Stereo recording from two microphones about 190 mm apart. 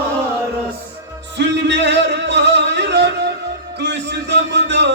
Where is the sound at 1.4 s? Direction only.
65° right (ahead or behind).